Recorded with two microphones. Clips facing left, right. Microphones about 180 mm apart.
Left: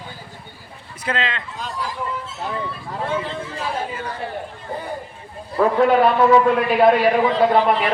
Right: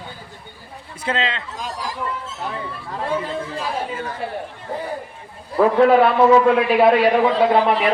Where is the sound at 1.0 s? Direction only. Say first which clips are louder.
Right 1 dB; 25° right (ahead or behind).